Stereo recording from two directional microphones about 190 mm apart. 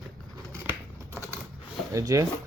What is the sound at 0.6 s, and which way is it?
Scissors, 10° right (ahead or behind).